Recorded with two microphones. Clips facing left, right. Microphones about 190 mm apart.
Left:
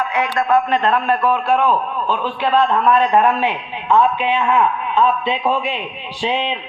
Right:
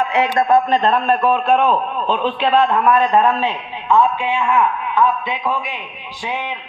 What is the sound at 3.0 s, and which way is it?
A man's voice, 15° left (ahead or behind).